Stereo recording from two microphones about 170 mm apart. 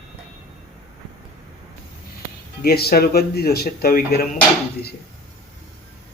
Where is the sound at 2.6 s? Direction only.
65° left (ahead or behind).